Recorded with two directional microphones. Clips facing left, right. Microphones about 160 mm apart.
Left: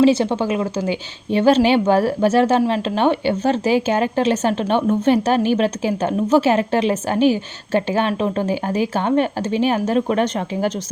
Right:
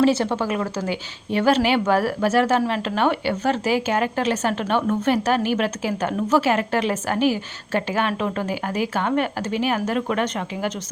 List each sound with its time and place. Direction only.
0.0 s a woman's voice: 20° left (ahead or behind)